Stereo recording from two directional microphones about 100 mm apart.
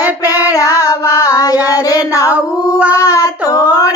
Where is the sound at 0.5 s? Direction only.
35° left (ahead or behind).